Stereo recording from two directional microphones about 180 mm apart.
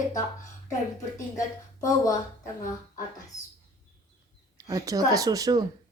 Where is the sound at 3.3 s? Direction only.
20° left (ahead or behind).